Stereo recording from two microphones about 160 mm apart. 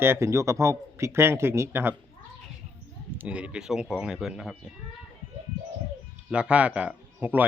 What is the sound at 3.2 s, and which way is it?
Speech, 5° right (ahead or behind).